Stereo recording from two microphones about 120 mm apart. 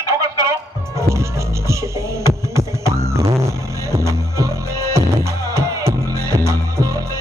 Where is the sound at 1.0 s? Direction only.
25° right (ahead or behind).